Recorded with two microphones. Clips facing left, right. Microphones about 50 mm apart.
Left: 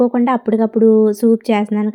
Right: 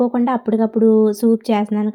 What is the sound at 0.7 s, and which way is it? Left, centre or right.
Speech, left.